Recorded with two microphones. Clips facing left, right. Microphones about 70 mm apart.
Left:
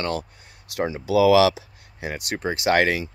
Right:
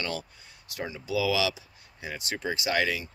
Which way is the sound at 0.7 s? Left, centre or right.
Left.